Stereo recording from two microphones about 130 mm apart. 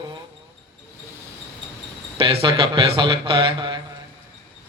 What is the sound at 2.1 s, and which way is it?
A man's voice, 45° right (ahead or behind).